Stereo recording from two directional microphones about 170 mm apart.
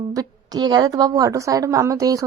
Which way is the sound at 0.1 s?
20° right (ahead or behind).